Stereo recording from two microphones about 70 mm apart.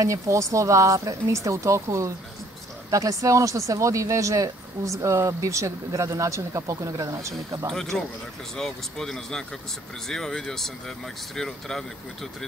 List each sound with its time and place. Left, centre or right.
0.0 s speech: right
7.7 s speech: centre